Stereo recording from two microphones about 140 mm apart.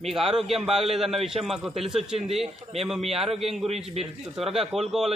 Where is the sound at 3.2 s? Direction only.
45° right (ahead or behind).